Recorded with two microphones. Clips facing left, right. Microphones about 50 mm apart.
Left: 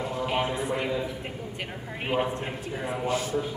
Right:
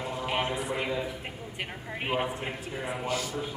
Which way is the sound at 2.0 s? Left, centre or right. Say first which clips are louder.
Left 3 dB; centre.